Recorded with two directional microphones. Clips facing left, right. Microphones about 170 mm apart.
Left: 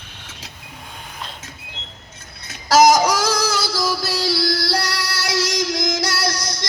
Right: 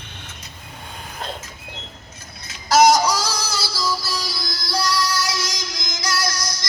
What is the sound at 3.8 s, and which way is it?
Music, 80° left.